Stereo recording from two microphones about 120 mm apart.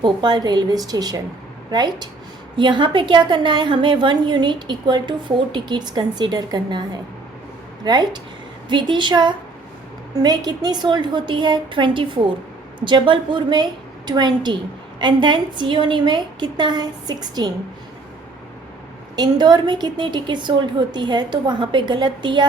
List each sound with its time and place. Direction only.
0.0 s a woman's voice: 35° right (ahead or behind)
19.1 s a woman's voice: 35° right (ahead or behind)